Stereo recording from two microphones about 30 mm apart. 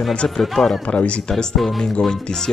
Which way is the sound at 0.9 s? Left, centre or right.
Left.